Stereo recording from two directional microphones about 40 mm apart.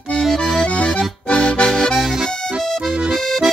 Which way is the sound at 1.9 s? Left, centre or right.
Centre.